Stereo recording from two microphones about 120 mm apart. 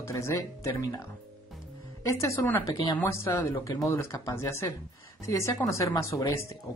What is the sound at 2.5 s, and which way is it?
Speech, 25° left (ahead or behind).